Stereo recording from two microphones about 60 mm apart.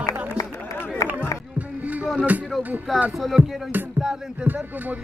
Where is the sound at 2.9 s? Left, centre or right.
Centre.